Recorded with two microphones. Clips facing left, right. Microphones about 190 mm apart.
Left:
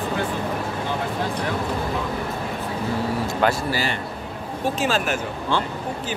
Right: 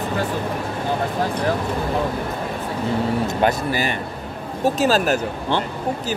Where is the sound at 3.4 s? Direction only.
20° right (ahead or behind).